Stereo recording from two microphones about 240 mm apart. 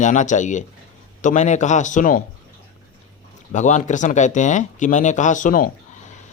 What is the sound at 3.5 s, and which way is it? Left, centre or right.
A man's voice, left.